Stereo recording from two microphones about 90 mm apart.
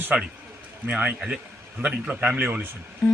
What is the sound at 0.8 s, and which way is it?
A man's voice, 20° right (ahead or behind).